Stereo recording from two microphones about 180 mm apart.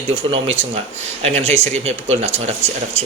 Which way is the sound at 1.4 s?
35° right (ahead or behind).